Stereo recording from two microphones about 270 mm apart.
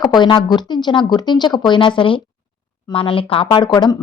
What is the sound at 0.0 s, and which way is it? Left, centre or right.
Speech, centre.